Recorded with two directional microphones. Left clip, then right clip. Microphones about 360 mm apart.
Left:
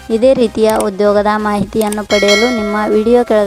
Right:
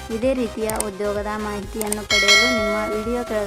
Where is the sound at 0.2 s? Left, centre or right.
Left.